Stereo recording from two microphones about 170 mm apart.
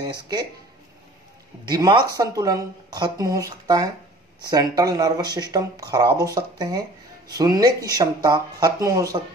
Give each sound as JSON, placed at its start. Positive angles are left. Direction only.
{"t": 0.0, "sound": "speech", "side_deg": -25}
{"t": 1.7, "sound": "speech", "side_deg": -25}